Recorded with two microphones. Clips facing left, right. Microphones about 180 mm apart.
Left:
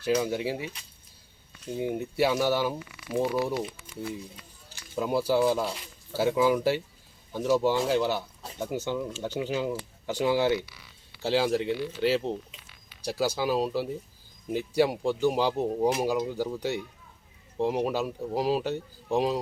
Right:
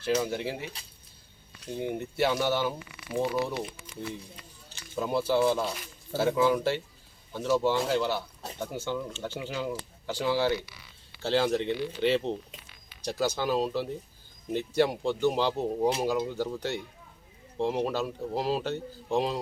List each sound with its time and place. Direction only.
0.0 s speech: 15° left (ahead or behind)
1.7 s speech: 10° left (ahead or behind)
4.9 s speech: 10° left (ahead or behind)